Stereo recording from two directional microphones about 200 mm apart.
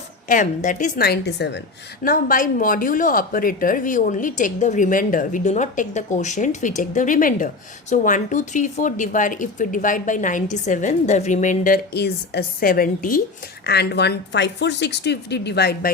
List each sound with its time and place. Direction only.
0.3 s a woman's voice: 40° left (ahead or behind); by 1.6 s 60° left (ahead or behind)
2.0 s a woman's voice: 45° left (ahead or behind)
13.7 s a woman's voice: 55° left (ahead or behind)